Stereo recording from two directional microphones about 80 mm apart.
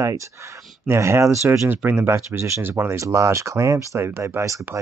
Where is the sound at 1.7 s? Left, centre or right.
Right.